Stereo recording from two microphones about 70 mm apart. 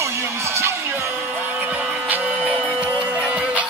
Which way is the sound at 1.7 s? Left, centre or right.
Right.